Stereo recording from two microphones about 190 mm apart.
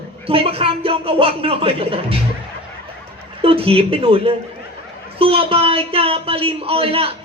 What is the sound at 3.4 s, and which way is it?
Speech, 30° right (ahead or behind).